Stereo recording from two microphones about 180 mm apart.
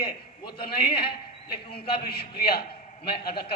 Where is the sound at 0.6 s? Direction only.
60° left (ahead or behind).